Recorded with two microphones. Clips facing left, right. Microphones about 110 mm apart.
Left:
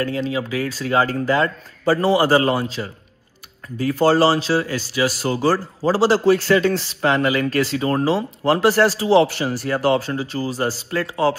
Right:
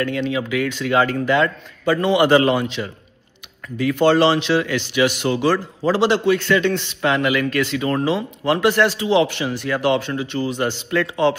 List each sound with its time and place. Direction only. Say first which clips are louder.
0.0 s speech: right 1 dB; 35° left (ahead or behind)